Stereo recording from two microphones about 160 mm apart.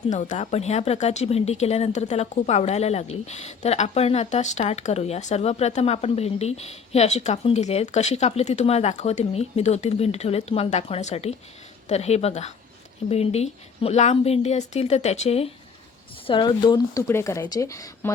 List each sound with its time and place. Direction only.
0.1 s speech: 50° left (ahead or behind); by 18.1 s 20° left (ahead or behind)